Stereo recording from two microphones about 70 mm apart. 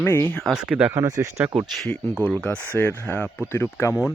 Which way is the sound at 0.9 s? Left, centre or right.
Right.